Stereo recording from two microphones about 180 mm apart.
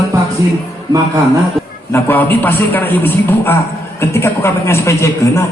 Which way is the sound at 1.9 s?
10° left (ahead or behind).